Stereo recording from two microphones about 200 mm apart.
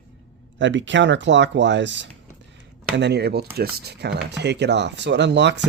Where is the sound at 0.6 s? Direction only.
65° right (ahead or behind).